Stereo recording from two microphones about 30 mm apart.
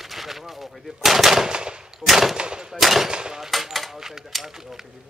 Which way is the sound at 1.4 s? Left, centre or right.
Right.